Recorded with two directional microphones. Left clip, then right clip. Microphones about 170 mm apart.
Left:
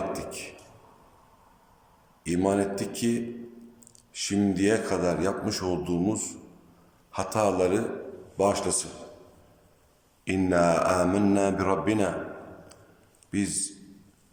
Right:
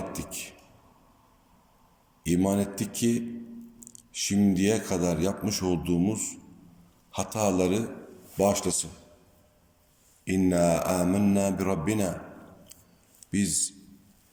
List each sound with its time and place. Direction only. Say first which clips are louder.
0.1 s a sound: left 4 dB; 25° right (ahead or behind)
2.2 s speech: left 2 dB; 20° right (ahead or behind)
10.2 s speech: left 1 dB; 25° right (ahead or behind)
13.3 s speech: right 1 dB; 25° right (ahead or behind)